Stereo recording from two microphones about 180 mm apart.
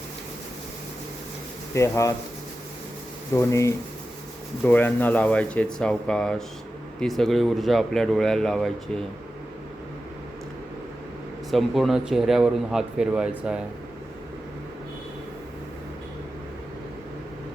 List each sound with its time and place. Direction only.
1.7 s speech: 15° left (ahead or behind)
3.3 s speech: 15° left (ahead or behind)
11.5 s speech: centre (ahead or behind)